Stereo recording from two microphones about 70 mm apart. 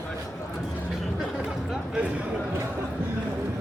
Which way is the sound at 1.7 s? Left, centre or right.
Centre.